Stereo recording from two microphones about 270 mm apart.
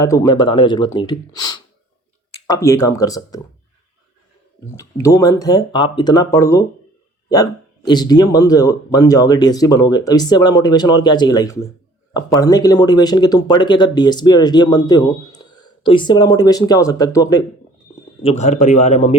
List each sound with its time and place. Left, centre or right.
0.0 s speech: centre
4.8 s speech: centre
18.2 s a man's voice: left